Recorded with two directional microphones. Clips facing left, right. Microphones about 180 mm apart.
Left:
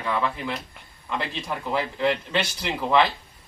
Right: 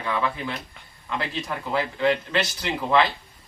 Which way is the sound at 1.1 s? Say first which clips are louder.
Even; 5° left (ahead or behind).